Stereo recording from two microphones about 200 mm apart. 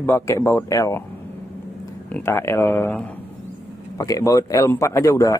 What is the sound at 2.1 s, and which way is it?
Speech, 10° left (ahead or behind).